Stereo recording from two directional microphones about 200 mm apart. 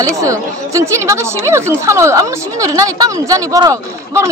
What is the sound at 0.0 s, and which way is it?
Speech, 15° right (ahead or behind).